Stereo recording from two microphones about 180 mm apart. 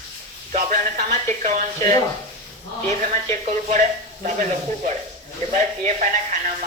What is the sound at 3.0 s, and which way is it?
Speech, 40° right (ahead or behind).